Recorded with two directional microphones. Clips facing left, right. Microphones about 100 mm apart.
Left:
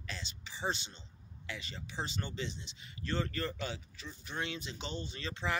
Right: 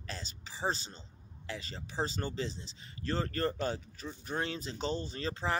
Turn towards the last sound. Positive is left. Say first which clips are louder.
# right 3 dB
turn(degrees=-35)  # may be behind; listen again after turning